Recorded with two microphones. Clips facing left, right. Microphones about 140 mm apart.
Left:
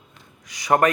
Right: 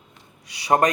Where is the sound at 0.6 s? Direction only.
35° right (ahead or behind).